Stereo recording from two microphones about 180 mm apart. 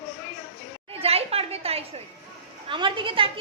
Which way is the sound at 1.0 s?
35° right (ahead or behind).